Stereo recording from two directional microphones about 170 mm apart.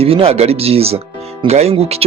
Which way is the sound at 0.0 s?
35° right (ahead or behind).